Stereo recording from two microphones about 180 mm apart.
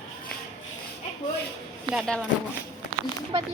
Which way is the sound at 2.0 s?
5° left (ahead or behind).